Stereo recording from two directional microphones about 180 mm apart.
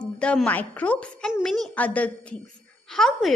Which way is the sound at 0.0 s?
5° left (ahead or behind).